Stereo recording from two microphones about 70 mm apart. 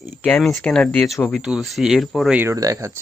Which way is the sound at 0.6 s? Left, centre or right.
Centre.